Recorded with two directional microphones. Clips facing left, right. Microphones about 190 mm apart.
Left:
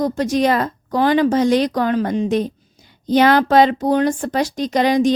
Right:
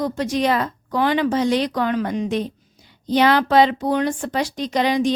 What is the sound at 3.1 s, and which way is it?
A woman's voice, 45° left (ahead or behind).